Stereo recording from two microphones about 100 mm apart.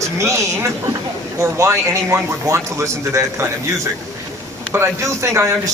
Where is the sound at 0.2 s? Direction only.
30° right (ahead or behind).